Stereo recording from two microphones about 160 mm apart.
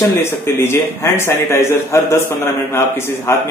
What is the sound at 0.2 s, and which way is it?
Speech, 15° left (ahead or behind).